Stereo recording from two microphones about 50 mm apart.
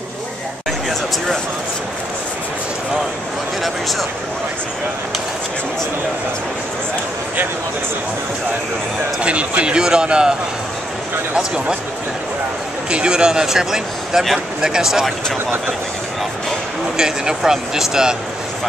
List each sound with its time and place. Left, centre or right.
9.2 s a man's voice: right
11.3 s speech: centre
12.9 s speech: centre
16.9 s speech: centre